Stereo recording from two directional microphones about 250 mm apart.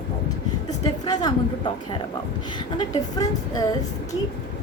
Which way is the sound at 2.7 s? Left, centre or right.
Centre.